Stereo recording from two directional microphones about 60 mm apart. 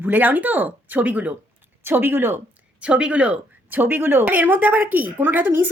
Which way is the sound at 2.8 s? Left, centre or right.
Centre.